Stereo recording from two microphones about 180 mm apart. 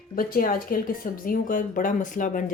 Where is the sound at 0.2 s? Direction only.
50° left (ahead or behind).